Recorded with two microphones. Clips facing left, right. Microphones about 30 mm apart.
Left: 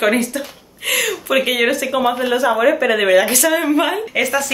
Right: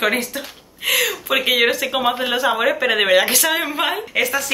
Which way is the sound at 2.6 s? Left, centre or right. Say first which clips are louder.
Left 3 dB; centre.